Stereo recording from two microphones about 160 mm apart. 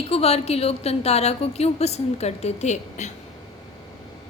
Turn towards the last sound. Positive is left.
turn(degrees=45)  # may be behind; listen again after turning